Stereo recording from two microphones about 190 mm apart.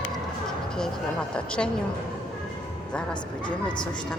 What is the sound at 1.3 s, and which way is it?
Speech, 5° left (ahead or behind).